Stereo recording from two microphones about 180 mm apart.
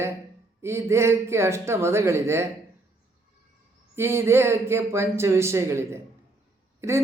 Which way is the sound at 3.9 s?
15° right (ahead or behind).